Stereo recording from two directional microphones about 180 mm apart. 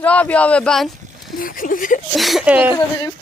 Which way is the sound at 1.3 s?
50° left (ahead or behind).